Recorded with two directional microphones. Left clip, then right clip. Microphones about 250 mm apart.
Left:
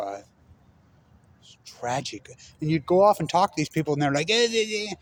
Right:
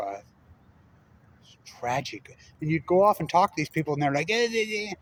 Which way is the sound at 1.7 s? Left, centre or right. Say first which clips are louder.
Even; left.